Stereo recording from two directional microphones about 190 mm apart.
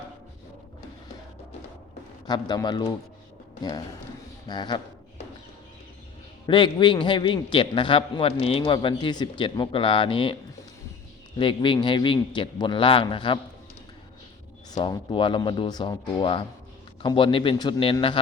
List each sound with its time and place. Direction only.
2.2 s a man's voice: 20° left (ahead or behind)
4.4 s a sound: 25° left (ahead or behind)
6.4 s a man's voice: 25° left (ahead or behind)
11.3 s a man's voice: 25° left (ahead or behind)
14.8 s a man's voice: 25° left (ahead or behind)